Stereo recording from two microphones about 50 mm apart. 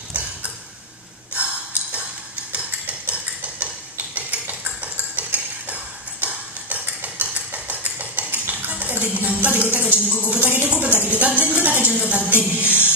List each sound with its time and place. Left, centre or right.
1.3 s snort: right
2.5 s cutlery: right
4.1 s a sound: right